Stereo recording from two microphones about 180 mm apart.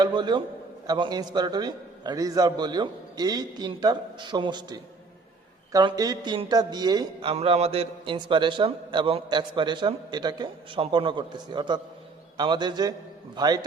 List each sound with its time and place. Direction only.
0.0 s a man's voice: 25° right (ahead or behind)